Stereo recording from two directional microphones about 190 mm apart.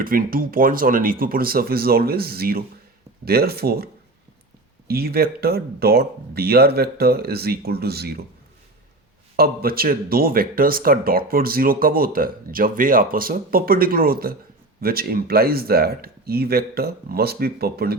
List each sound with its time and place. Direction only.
0.0 s speech: 50° right (ahead or behind)
4.9 s speech: 55° right (ahead or behind)
9.3 s speech: 50° right (ahead or behind)